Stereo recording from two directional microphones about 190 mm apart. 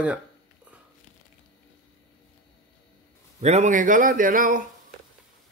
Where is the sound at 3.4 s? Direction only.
35° right (ahead or behind).